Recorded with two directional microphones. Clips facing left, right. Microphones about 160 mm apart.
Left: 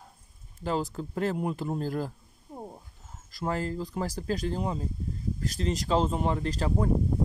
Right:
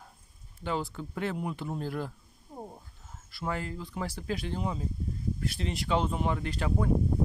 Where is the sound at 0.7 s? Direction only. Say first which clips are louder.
Left 3 dB; 35° left (ahead or behind).